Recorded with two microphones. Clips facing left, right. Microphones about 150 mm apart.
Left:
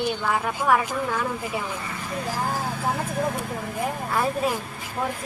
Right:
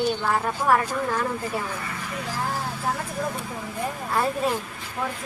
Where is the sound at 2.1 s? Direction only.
40° left (ahead or behind).